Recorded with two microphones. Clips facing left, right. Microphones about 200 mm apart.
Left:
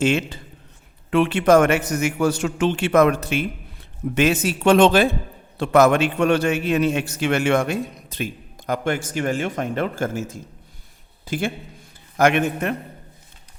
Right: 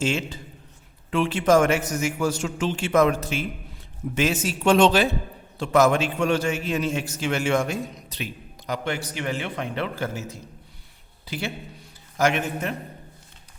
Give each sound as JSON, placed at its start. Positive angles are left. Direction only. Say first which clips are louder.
{"t": 0.0, "sound": "a man's voice", "louder": "left 5 dB", "side_deg": 60}